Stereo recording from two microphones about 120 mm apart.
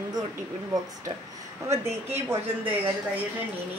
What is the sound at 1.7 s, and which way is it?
Speech, 20° right (ahead or behind).